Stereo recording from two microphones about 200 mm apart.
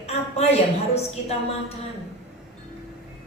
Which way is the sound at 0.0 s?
30° left (ahead or behind).